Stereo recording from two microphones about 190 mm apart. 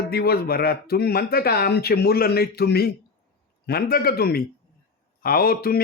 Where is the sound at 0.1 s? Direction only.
55° left (ahead or behind).